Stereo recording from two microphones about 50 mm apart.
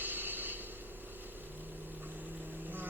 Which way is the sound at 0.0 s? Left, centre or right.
Right.